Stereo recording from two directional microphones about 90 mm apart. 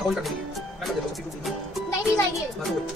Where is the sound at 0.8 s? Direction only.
Centre (ahead or behind).